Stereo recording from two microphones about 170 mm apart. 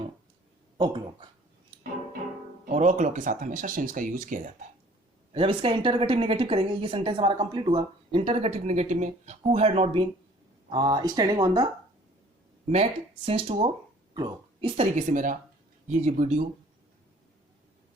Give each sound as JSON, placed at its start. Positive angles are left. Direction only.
{"t": 0.8, "sound": "speech", "side_deg": -25}
{"t": 2.6, "sound": "speech", "side_deg": -45}
{"t": 5.3, "sound": "speech", "side_deg": -30}
{"t": 12.7, "sound": "speech", "side_deg": -35}
{"t": 14.9, "sound": "speech", "side_deg": -50}